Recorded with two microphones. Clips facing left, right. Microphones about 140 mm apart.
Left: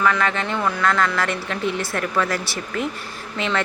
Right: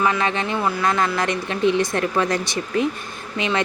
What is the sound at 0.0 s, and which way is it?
Speech, 20° right (ahead or behind).